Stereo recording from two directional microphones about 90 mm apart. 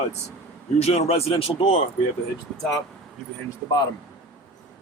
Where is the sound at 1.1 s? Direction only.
90° left.